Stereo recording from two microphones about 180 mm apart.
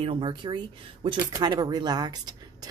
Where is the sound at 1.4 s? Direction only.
25° right (ahead or behind).